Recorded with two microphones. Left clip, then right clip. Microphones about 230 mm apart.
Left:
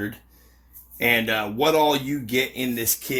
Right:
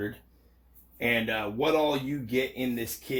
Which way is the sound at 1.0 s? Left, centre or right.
Left.